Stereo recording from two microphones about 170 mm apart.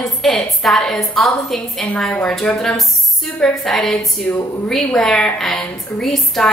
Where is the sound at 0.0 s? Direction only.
Centre (ahead or behind).